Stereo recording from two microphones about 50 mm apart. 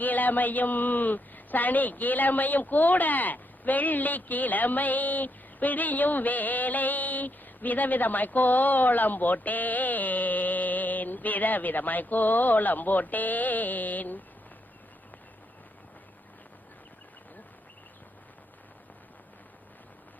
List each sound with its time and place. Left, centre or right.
0.0 s a woman's voice: left